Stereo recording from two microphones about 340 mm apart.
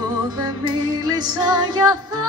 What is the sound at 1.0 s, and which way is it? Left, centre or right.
Music, centre.